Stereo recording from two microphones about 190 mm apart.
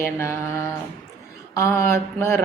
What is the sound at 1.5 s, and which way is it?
Speech, 15° left (ahead or behind).